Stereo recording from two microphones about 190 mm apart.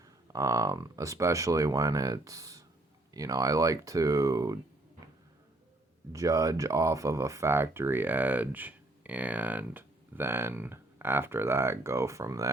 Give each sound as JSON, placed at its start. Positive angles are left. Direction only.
{"t": 0.0, "sound": "speech", "side_deg": -15}
{"t": 6.1, "sound": "speech", "side_deg": -15}